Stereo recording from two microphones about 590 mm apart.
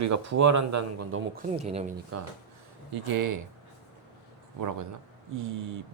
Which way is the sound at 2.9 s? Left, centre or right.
Right.